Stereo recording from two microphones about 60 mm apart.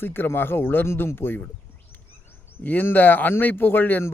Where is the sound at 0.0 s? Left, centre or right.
Left.